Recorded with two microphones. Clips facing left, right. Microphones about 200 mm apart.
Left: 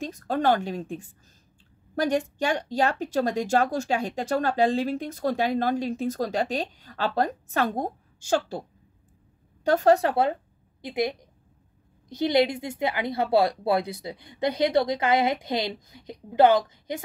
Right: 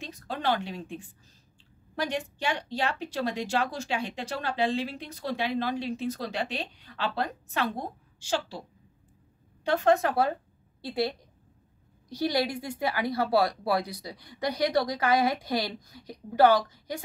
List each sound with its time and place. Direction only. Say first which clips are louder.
0.0 s speech: left 7 dB; 45° left (ahead or behind)
9.7 s a woman's voice: left 4 dB; 40° left (ahead or behind)
10.8 s a woman's voice: left 2 dB; 20° left (ahead or behind)